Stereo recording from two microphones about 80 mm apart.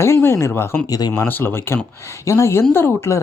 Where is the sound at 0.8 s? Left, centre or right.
Left.